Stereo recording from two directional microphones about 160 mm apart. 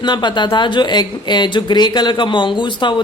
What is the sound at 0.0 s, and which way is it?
Speech, 30° left (ahead or behind).